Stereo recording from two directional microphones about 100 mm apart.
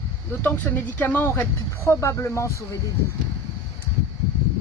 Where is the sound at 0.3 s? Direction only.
20° left (ahead or behind).